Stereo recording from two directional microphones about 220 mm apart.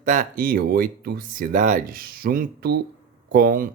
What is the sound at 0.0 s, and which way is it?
Speech, 35° right (ahead or behind).